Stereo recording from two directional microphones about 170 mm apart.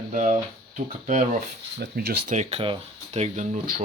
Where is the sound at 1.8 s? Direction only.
65° right (ahead or behind).